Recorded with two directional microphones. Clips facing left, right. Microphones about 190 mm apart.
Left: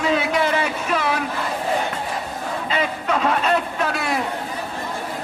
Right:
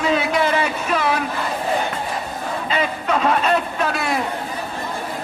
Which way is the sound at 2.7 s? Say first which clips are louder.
Right 1 dB; 30° right (ahead or behind).